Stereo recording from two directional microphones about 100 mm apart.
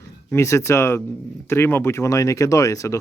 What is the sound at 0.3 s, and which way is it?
Speech, 30° left (ahead or behind).